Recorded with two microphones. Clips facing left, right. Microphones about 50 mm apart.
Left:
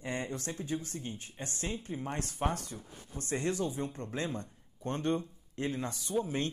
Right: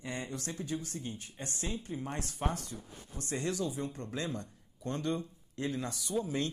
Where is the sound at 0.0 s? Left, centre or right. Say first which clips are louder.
Left 3 dB; left.